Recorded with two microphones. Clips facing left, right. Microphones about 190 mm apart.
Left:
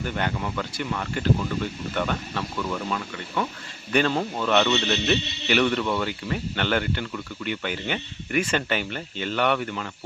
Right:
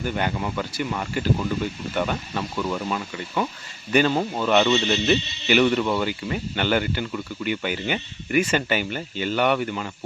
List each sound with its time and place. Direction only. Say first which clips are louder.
0.0 s speech: right 2 dB; 5° right (ahead or behind)
5.0 s speech: right 3 dB; 5° right (ahead or behind)